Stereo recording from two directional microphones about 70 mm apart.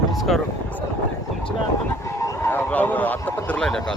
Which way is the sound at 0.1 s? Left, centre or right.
Centre.